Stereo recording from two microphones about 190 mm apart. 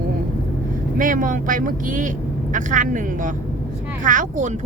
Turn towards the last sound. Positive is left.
turn(degrees=-40)  # may be behind; listen again after turning